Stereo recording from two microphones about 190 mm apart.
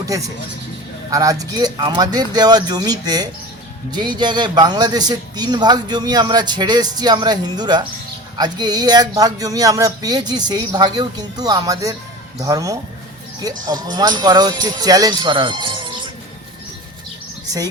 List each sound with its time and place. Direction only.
0.0 s speech: 15° right (ahead or behind)